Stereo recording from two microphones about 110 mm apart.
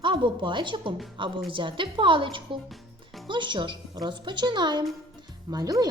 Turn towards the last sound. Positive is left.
turn(degrees=-35)  # may be behind; listen again after turning